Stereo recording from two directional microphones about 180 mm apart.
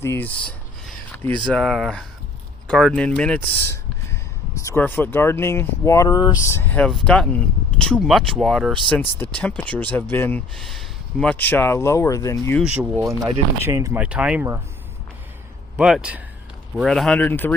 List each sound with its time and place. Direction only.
0.0 s a sound: 10° left (ahead or behind)
1.5 s speech: centre (ahead or behind); by 12.5 s 20° left (ahead or behind)
13.0 s speech: 15° right (ahead or behind)
15.8 s speech: 5° right (ahead or behind); by 17.5 s 10° left (ahead or behind)